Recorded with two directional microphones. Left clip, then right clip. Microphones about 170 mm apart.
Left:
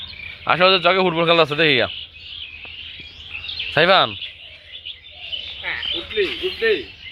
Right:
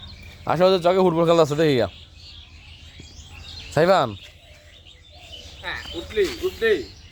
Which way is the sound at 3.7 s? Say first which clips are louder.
Left 3 dB; 5° right (ahead or behind).